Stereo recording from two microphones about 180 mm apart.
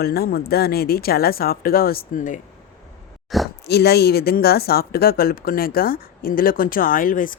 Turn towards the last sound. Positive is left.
turn(degrees=50)  # may be behind; listen again after turning